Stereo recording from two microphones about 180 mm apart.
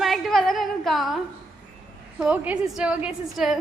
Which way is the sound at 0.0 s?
Centre (ahead or behind).